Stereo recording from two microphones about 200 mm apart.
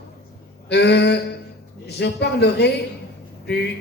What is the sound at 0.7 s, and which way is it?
A man's voice, 55° left (ahead or behind).